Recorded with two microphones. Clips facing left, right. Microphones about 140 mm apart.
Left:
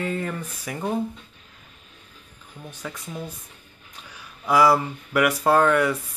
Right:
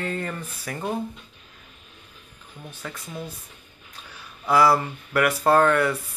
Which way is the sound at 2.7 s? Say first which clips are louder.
Left 2 dB; 15° left (ahead or behind).